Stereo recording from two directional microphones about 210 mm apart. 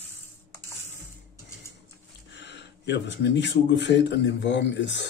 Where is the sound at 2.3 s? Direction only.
55° left (ahead or behind).